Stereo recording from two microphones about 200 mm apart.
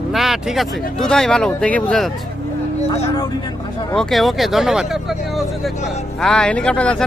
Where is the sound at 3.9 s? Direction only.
Centre (ahead or behind).